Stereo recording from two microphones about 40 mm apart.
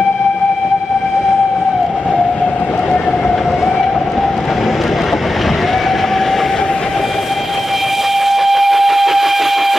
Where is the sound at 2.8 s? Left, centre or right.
Left.